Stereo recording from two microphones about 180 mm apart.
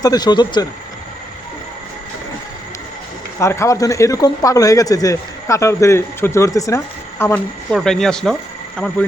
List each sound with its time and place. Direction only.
0.0 s speech: 20° left (ahead or behind)
3.4 s a man's voice: 15° left (ahead or behind)
7.7 s speech: centre (ahead or behind)